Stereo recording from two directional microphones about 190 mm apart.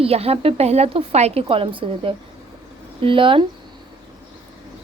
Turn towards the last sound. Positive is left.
turn(degrees=-25)  # may be behind; listen again after turning